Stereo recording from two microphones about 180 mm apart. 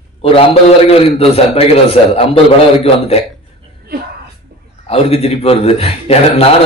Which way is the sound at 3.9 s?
60° right (ahead or behind).